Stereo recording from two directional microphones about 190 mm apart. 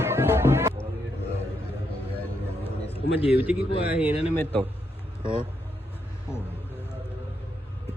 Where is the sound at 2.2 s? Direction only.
10° left (ahead or behind).